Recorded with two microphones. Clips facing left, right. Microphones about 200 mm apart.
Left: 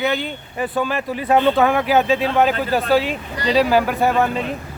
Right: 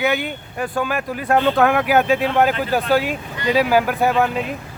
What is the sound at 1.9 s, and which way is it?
Speech, 10° right (ahead or behind).